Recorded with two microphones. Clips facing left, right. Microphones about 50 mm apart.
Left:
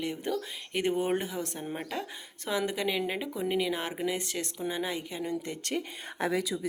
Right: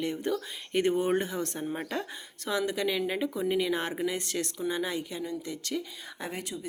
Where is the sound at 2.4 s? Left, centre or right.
Left.